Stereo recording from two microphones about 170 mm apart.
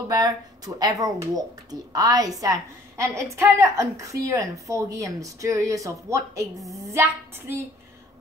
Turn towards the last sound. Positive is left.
turn(degrees=-15)  # may be behind; listen again after turning